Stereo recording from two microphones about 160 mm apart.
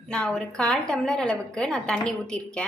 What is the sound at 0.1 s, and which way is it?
A woman's voice, 5° left (ahead or behind).